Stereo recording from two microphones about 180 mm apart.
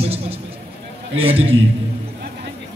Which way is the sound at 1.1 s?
30° right (ahead or behind).